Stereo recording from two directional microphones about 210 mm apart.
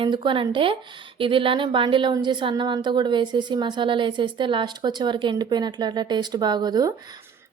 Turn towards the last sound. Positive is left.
turn(degrees=-10)  # may be behind; listen again after turning